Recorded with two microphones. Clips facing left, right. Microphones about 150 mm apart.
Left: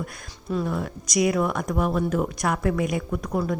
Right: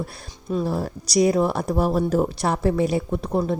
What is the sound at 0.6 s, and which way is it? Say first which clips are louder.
Speech: right 3 dB; 35° right (ahead or behind).